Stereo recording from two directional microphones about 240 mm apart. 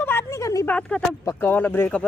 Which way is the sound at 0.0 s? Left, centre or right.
Centre.